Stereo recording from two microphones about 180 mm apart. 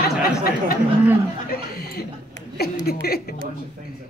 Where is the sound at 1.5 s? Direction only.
60° left (ahead or behind).